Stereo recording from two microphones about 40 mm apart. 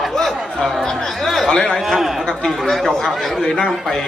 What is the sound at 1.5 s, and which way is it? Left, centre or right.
Speech, left.